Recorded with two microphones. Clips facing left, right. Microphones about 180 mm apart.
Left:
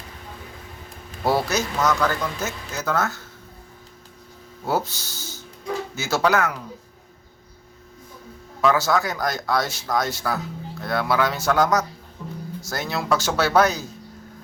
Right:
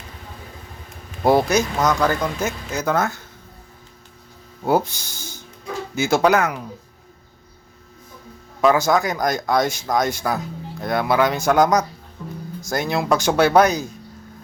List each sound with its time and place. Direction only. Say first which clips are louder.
1.2 s speech: right 5 dB; 20° right (ahead or behind)
4.6 s speech: right 5 dB; 15° right (ahead or behind)
8.6 s speech: right 3 dB; 15° right (ahead or behind)